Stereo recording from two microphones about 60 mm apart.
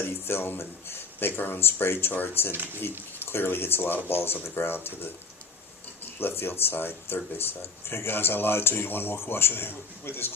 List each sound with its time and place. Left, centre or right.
0.3 s speech: left
2.5 s speech: right
3.2 s speech: left
6.1 s speech: left